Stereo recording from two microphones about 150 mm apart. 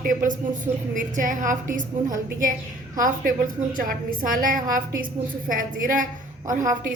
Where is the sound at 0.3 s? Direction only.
60° right (ahead or behind).